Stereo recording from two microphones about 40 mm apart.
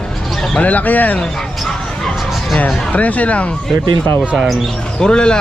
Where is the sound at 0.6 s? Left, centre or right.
Left.